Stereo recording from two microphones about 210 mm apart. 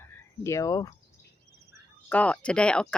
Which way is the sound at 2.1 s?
5° left (ahead or behind).